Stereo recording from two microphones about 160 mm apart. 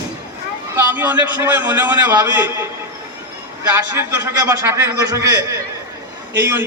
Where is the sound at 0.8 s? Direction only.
10° right (ahead or behind).